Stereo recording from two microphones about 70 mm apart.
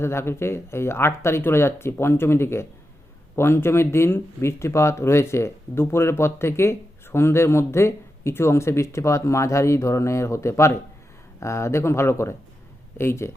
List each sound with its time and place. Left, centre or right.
0.0 s speech: left